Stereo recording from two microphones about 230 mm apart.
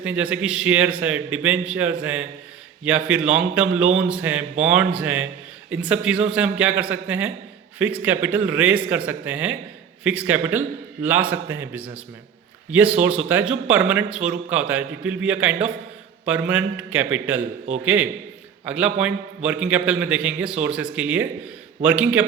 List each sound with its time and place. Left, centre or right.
0.0 s a man's voice: centre